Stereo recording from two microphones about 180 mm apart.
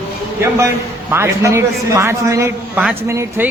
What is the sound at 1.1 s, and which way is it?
A man's voice, 15° right (ahead or behind).